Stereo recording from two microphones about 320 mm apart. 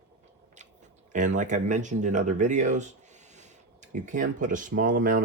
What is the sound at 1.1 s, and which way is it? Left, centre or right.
Speech, right.